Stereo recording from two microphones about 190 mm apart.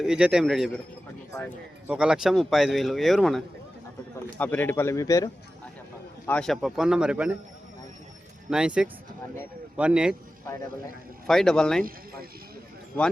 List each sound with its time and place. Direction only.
0.0 s speech: 5° right (ahead or behind)
1.9 s speech: 5° right (ahead or behind); by 5.3 s 20° left (ahead or behind)
6.2 s speech: 5° left (ahead or behind)
8.4 s speech: 5° right (ahead or behind)
11.3 s speech: centre (ahead or behind)